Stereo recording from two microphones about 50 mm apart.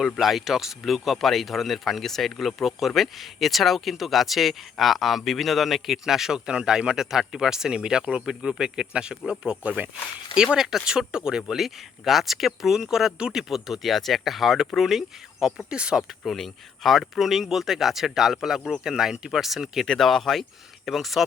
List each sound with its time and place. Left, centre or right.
0.0 s speech: centre
9.6 s speech: right
10.3 s speech: centre
13.5 s speech: centre
15.7 s speech: centre
16.2 s speech: centre
17.2 s speech: centre